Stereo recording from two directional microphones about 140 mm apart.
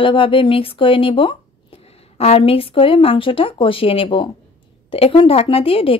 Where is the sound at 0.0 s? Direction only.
40° left (ahead or behind).